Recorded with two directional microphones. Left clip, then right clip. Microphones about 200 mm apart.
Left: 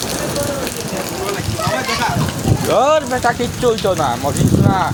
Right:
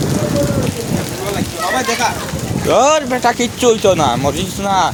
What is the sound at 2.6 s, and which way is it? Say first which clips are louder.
Speech: right 2 dB; 45° right (ahead or behind).